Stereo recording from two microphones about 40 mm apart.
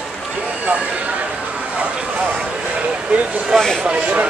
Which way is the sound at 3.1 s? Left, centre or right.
Right.